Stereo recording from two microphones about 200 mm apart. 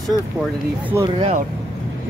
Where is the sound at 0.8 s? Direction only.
15° right (ahead or behind).